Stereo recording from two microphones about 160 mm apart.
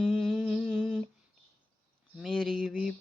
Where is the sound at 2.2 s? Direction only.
Centre (ahead or behind).